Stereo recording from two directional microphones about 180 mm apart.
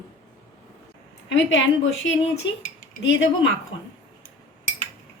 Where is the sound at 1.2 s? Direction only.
90° left.